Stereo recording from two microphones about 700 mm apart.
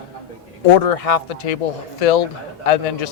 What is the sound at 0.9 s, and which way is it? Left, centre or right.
Speech, left.